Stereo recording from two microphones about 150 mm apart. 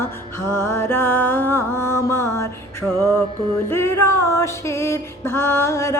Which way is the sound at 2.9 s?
25° right (ahead or behind).